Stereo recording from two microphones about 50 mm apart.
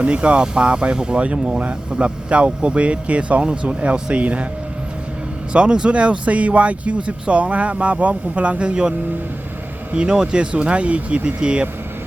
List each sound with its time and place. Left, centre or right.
0.0 s speech: right
5.5 s speech: centre